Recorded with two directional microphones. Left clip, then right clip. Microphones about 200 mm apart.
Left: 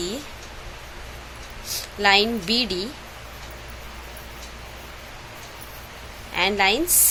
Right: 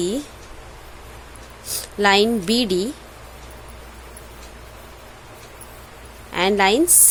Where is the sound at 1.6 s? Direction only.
40° right (ahead or behind).